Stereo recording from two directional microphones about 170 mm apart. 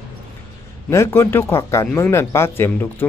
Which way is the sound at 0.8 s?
15° left (ahead or behind).